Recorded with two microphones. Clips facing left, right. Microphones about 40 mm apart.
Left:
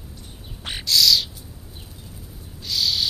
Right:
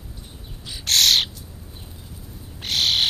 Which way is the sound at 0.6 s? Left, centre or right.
Left.